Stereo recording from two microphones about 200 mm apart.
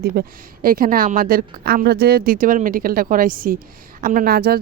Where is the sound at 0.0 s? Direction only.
50° right (ahead or behind).